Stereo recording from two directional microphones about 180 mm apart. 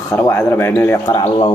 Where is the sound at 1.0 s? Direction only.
25° left (ahead or behind).